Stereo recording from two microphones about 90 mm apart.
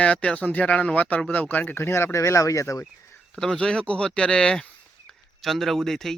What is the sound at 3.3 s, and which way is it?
A man's voice, 5° left (ahead or behind).